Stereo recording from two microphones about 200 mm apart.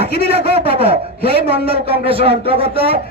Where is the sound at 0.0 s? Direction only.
30° right (ahead or behind).